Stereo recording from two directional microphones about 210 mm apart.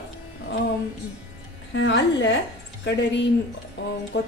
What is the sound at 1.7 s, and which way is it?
A woman's voice, 60° left (ahead or behind).